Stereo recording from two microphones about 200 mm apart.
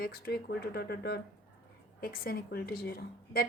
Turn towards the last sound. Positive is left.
turn(degrees=50)  # may be behind; listen again after turning